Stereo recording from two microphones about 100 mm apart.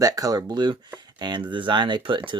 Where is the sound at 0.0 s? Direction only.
35° right (ahead or behind).